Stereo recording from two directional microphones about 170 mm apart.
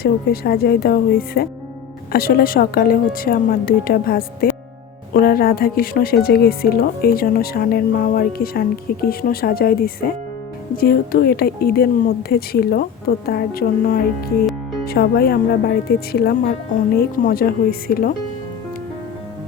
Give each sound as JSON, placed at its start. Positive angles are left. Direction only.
{"t": 0.0, "sound": "speech", "side_deg": 65}